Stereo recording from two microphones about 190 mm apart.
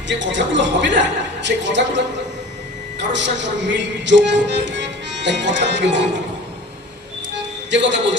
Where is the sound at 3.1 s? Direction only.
70° right (ahead or behind).